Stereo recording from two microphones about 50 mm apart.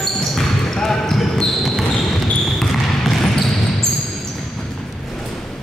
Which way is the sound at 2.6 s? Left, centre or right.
Centre.